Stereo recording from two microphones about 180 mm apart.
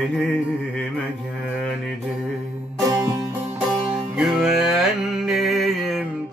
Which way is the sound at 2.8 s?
20° right (ahead or behind).